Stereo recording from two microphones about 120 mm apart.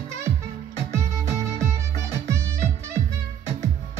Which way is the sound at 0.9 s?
25° right (ahead or behind).